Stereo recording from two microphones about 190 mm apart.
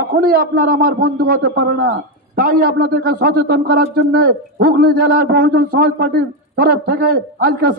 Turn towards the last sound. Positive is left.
turn(degrees=-55)  # may be behind; listen again after turning